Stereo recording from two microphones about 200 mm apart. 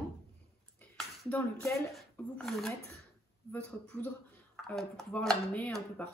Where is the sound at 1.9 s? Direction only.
Centre (ahead or behind).